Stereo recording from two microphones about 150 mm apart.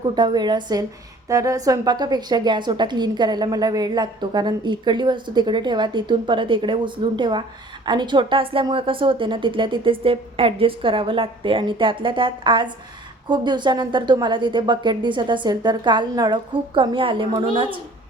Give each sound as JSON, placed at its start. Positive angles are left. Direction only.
{"t": 0.1, "sound": "a woman's voice", "side_deg": -30}